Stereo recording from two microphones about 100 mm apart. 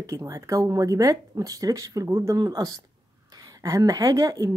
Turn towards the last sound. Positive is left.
turn(degrees=-35)  # may be behind; listen again after turning